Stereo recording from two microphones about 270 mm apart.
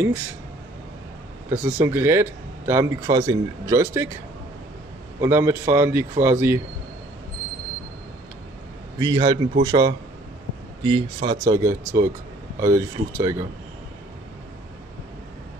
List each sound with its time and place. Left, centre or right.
1.6 s a man's voice: centre
5.2 s a man's voice: centre
9.0 s a man's voice: centre